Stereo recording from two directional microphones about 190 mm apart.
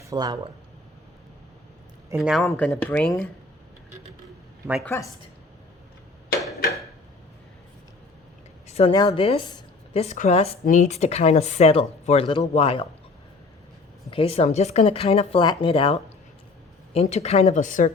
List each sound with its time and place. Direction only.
0.0 s speech: 20° right (ahead or behind)
2.1 s speech: centre (ahead or behind)
4.9 s speech: 15° left (ahead or behind)
8.6 s a sound: 35° left (ahead or behind)
8.9 s speech: 20° left (ahead or behind)
14.1 s speech: 30° left (ahead or behind)